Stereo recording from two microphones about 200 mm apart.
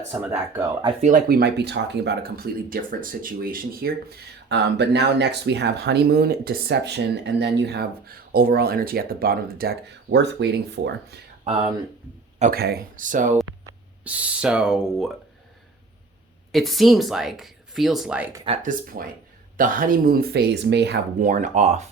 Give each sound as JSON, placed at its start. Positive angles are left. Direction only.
{"t": 0.1, "sound": "speech", "side_deg": -10}
{"t": 1.0, "sound": "speech", "side_deg": -45}
{"t": 4.4, "sound": "speech", "side_deg": -60}
{"t": 11.4, "sound": "speech", "side_deg": -30}
{"t": 12.4, "sound": "speech", "side_deg": -50}
{"t": 14.0, "sound": "speech", "side_deg": -5}
{"t": 16.5, "sound": "speech", "side_deg": 0}
{"t": 18.4, "sound": "speech", "side_deg": -35}
{"t": 21.2, "sound": "speech", "side_deg": -40}